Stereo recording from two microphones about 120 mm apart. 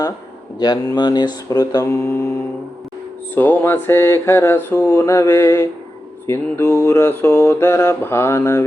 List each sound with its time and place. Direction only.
0.6 s speech: 35° left (ahead or behind); by 2.3 s 20° left (ahead or behind)
3.3 s speech: 15° left (ahead or behind)